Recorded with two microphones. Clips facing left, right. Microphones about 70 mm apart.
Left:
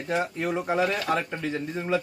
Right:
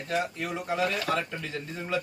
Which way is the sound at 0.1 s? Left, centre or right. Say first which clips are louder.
Left 4 dB; left.